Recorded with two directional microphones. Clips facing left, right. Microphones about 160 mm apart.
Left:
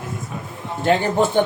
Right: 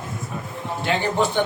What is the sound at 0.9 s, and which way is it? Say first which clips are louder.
Speech: left 6 dB; 45° left (ahead or behind).